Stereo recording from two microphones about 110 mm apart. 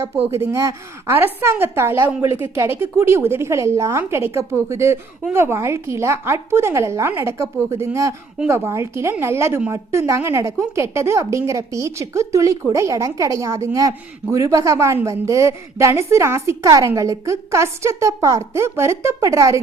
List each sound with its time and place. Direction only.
0.3 s speech: 25° right (ahead or behind)